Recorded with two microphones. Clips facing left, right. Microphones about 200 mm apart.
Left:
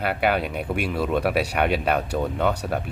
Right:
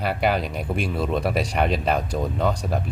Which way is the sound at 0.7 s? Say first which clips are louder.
Left 1 dB; 70° left (ahead or behind).